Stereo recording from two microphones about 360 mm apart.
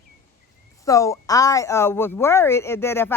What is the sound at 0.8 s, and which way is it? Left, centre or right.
Speech, centre.